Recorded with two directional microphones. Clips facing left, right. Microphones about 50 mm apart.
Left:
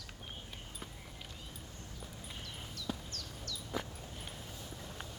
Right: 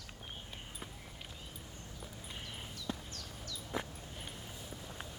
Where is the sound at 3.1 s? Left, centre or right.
Centre.